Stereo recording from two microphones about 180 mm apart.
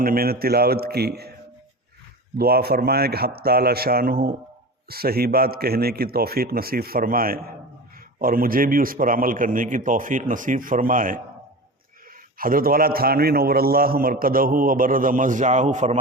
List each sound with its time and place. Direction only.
0.0 s speech: 55° right (ahead or behind)
2.4 s a man's voice: 60° right (ahead or behind)
12.4 s a man's voice: 55° right (ahead or behind)